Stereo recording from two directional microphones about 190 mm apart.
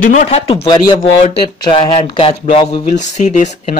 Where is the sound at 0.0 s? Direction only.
45° left (ahead or behind).